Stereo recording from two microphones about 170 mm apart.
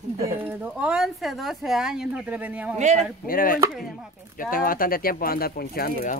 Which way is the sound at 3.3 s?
55° left (ahead or behind).